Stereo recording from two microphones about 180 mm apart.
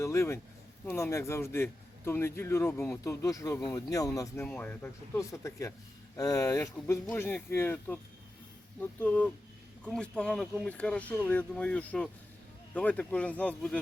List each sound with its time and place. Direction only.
0.0 s a man's voice: 15° left (ahead or behind)